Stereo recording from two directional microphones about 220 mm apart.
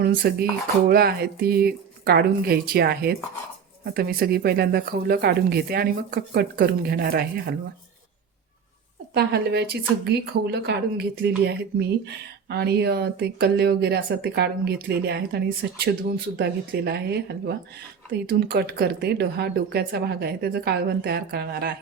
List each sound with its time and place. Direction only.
0.0 s speech: 45° right (ahead or behind)
9.1 s speech: 45° right (ahead or behind)